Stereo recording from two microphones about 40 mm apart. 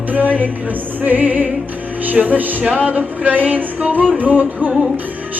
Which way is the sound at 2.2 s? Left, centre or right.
Right.